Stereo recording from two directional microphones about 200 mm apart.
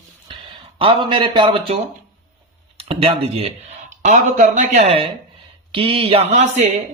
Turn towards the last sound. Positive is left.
turn(degrees=-35)  # may be behind; listen again after turning